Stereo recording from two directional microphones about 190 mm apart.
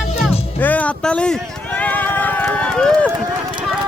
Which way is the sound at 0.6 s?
10° left (ahead or behind).